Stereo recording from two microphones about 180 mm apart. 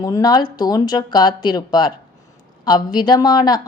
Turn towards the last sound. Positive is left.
turn(degrees=20)  # may be behind; listen again after turning